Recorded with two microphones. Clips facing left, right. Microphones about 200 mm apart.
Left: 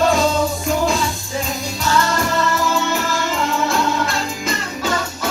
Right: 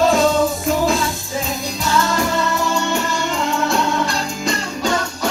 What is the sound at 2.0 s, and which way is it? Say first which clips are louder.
Music: even; centre (ahead or behind).